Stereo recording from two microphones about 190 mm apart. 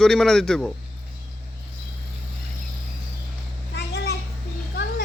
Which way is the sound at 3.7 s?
60° left (ahead or behind).